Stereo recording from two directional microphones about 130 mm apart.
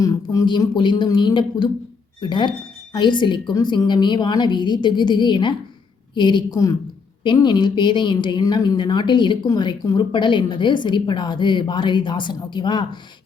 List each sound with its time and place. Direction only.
0.0 s a woman's voice: 25° left (ahead or behind)